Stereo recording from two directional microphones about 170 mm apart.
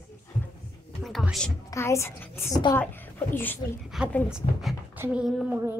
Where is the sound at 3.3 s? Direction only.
10° left (ahead or behind).